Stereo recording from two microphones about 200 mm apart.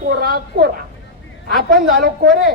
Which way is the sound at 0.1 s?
50° right (ahead or behind).